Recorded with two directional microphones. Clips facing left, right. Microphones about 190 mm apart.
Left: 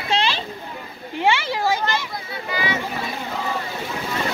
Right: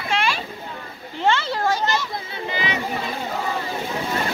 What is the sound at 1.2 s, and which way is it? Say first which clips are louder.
Speech: even; 10° left (ahead or behind).